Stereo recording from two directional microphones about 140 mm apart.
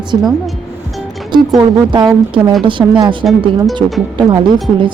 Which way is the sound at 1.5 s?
30° right (ahead or behind).